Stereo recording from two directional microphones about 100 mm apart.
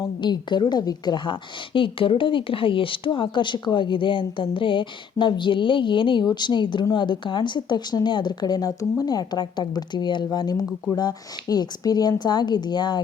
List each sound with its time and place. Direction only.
0.2 s a woman's voice: 50° left (ahead or behind)